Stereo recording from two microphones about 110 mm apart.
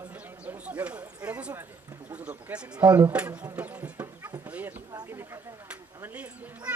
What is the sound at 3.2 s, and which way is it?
Speech, 10° right (ahead or behind).